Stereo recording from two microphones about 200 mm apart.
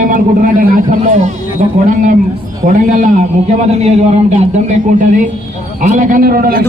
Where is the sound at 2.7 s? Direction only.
40° right (ahead or behind).